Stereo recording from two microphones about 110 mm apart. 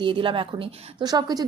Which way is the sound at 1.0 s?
40° right (ahead or behind).